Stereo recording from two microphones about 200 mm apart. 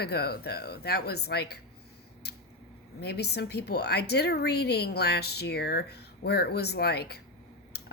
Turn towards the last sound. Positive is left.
turn(degrees=55)  # may be behind; listen again after turning